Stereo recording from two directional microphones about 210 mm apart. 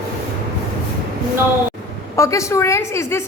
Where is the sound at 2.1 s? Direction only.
15° left (ahead or behind).